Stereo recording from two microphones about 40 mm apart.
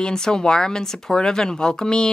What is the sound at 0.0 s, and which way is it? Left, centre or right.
Speech, centre.